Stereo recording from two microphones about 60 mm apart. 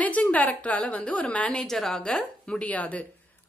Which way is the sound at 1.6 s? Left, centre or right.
Centre.